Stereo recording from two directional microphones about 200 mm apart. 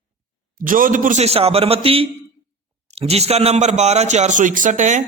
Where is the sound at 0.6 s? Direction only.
45° right (ahead or behind).